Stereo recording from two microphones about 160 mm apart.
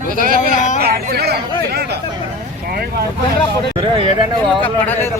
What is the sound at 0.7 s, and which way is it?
Speech, 75° right (ahead or behind).